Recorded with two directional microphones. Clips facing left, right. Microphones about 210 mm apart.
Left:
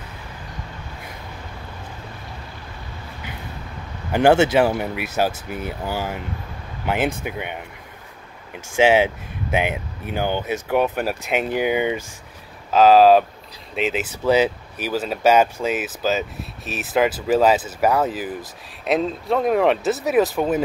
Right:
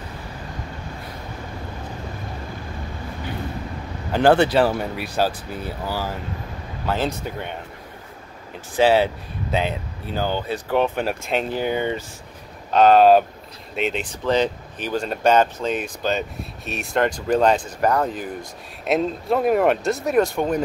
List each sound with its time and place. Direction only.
4.1 s speech: 10° left (ahead or behind)
8.8 s speech: 15° left (ahead or behind)